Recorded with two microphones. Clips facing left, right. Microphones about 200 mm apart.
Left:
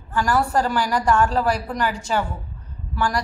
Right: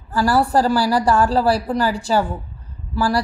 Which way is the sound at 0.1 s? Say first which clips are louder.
Right 4 dB; 35° right (ahead or behind).